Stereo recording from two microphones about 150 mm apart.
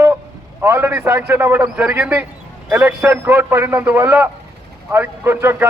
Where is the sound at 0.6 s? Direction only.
15° right (ahead or behind).